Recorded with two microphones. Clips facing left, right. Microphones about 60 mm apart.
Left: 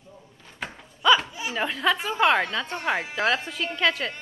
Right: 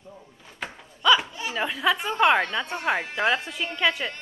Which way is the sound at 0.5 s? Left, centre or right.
Centre.